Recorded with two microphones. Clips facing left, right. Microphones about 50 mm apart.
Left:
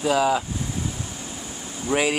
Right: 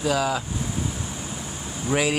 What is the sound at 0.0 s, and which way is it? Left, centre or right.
Speech, centre.